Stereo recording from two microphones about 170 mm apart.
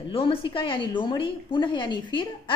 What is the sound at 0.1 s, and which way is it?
A woman's voice, 30° left (ahead or behind).